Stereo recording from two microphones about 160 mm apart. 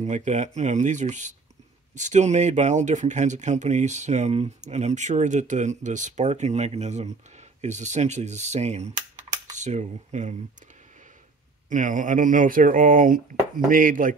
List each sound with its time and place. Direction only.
0.0 s speech: 45° right (ahead or behind)
11.7 s speech: 55° right (ahead or behind)